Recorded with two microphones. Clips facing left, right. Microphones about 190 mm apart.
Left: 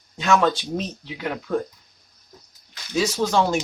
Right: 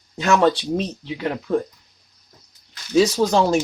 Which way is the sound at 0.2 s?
35° right (ahead or behind).